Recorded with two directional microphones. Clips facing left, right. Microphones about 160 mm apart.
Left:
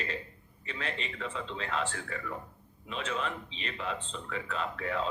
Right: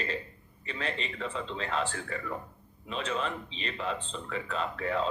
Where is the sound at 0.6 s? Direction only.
35° right (ahead or behind).